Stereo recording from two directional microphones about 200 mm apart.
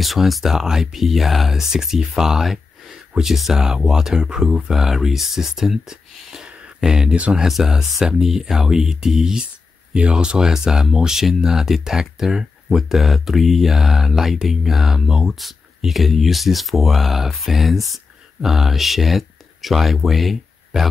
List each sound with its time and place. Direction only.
0.0 s speech: centre (ahead or behind)